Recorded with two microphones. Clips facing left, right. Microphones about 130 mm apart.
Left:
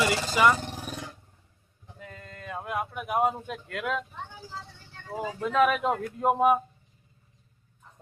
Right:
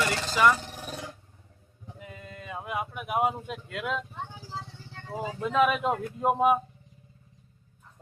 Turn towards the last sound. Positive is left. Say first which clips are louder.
# left 1 dB
turn(degrees=0)  # may be behind; listen again after turning